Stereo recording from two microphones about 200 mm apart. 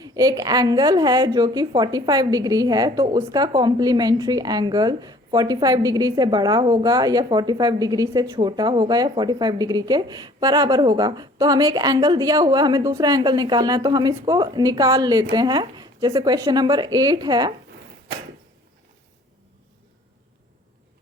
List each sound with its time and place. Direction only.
0.0 s a woman's voice: 20° right (ahead or behind)